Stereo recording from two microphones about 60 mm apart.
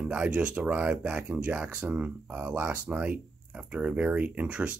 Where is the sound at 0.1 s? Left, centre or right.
Right.